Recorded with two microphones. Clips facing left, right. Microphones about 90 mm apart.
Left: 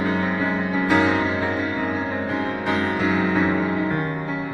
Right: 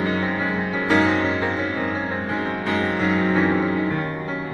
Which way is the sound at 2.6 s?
15° left (ahead or behind).